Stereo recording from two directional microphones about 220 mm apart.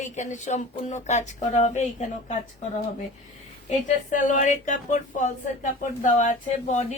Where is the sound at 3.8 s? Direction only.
35° left (ahead or behind).